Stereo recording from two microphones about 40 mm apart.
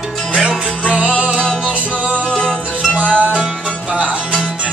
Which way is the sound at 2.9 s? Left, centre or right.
Left.